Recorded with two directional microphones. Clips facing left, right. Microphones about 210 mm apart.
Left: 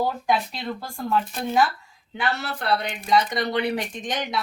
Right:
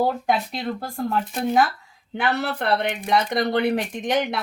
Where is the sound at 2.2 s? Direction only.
60° right (ahead or behind).